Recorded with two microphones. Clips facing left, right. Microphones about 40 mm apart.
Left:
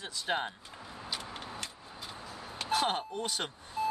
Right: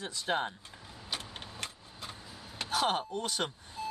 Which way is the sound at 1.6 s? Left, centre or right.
Right.